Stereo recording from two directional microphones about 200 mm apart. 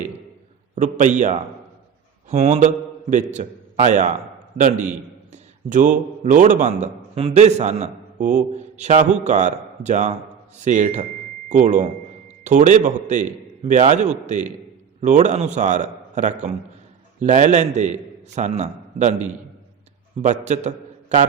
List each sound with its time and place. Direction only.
0.8 s a man's voice: 40° right (ahead or behind)